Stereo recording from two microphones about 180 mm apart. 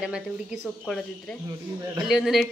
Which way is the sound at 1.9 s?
5° right (ahead or behind).